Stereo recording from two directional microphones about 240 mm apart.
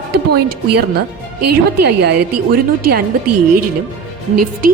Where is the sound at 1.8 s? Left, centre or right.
Right.